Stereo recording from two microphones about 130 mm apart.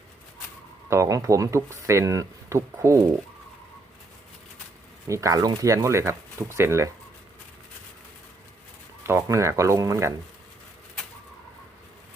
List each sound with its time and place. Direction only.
0.9 s speech: 25° right (ahead or behind)
5.0 s speech: 25° right (ahead or behind)
9.0 s speech: 20° right (ahead or behind)